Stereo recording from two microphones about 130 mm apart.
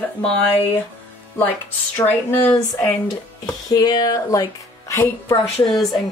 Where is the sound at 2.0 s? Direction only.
20° left (ahead or behind).